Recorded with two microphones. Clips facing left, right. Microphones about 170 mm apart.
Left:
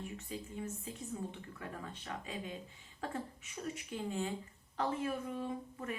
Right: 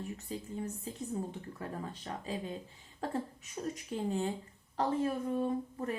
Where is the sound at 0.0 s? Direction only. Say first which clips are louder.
Right 3 dB; 35° right (ahead or behind).